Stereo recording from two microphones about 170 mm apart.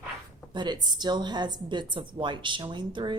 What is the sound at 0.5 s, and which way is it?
A woman's voice, 25° right (ahead or behind).